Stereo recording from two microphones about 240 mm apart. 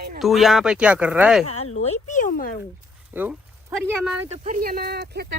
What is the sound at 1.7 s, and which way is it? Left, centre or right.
Speech, left.